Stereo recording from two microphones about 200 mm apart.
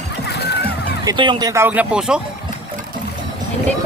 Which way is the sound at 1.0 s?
20° right (ahead or behind).